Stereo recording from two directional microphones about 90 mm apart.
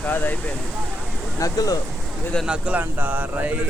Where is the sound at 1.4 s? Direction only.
40° left (ahead or behind).